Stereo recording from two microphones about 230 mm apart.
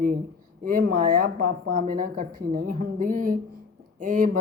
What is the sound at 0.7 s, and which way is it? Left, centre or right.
Speech, right.